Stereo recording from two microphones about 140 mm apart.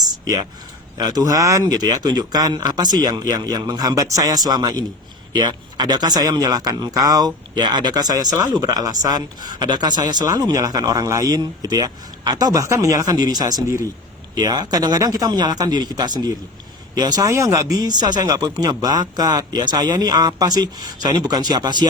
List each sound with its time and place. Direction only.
0.9 s speech: 30° right (ahead or behind)